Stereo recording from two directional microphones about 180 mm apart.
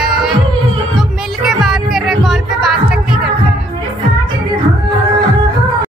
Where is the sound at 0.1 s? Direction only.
Centre (ahead or behind).